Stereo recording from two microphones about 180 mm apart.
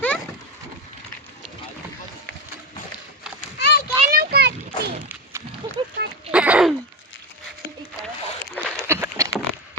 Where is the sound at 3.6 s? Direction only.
65° left (ahead or behind).